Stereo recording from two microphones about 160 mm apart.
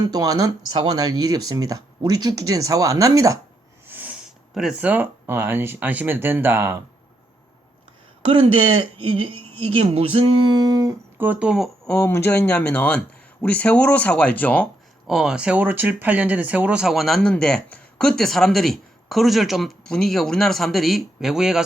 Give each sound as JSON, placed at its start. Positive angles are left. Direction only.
{"t": 0.0, "sound": "speech", "side_deg": -25}
{"t": 3.8, "sound": "speech", "side_deg": -10}
{"t": 8.2, "sound": "speech", "side_deg": -30}
{"t": 11.2, "sound": "speech", "side_deg": -10}
{"t": 11.9, "sound": "speech", "side_deg": 10}
{"t": 15.0, "sound": "speech", "side_deg": -5}